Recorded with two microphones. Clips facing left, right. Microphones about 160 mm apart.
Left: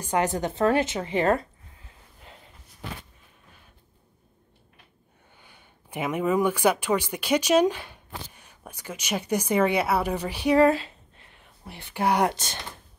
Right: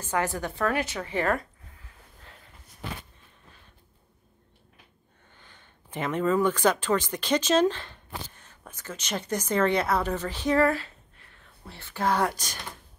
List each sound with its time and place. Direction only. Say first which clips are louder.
0.0 s a woman's voice: left 3 dB; 20° left (ahead or behind)
5.3 s speech: left 1 dB; 10° left (ahead or behind)
12.3 s a woman's voice: left 3 dB; 25° left (ahead or behind)